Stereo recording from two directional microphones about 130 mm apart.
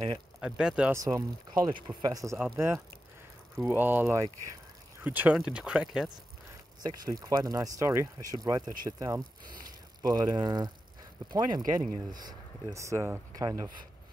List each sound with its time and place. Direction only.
0.4 s speech: 5° right (ahead or behind)
0.9 s speech: 25° right (ahead or behind)
1.7 s speech: 40° right (ahead or behind)
2.3 s speech: 15° right (ahead or behind)
6.8 s speech: 30° right (ahead or behind)